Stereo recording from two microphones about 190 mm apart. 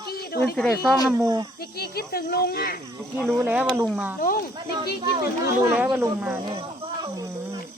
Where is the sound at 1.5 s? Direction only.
55° left (ahead or behind).